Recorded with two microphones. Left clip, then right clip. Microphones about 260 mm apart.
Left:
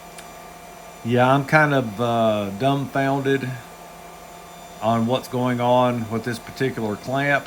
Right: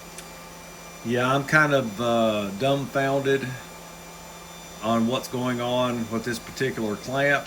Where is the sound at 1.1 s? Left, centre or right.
Centre.